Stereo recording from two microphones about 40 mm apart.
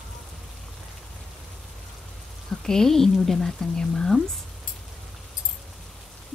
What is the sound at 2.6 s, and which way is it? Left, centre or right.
Speech, centre.